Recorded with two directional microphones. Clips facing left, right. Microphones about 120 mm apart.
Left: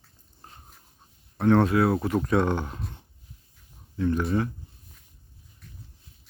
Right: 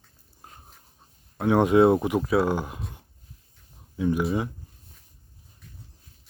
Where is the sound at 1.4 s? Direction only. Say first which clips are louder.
Right 2 dB; 10° right (ahead or behind).